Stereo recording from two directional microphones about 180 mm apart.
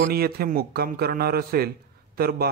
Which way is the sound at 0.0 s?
60° right (ahead or behind).